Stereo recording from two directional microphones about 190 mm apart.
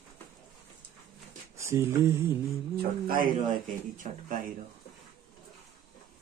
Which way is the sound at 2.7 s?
50° right (ahead or behind).